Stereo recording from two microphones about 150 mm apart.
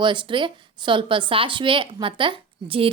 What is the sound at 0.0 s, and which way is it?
A woman's voice, 30° right (ahead or behind).